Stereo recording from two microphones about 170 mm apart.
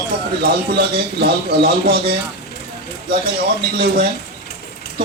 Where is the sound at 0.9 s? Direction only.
70° right (ahead or behind).